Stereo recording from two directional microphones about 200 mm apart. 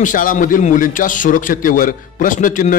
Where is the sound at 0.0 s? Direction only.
40° left (ahead or behind).